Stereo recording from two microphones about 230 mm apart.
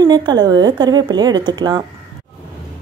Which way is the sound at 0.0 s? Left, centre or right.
Centre.